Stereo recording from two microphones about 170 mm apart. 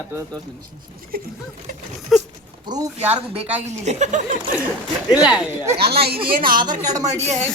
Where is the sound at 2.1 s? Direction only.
Centre (ahead or behind).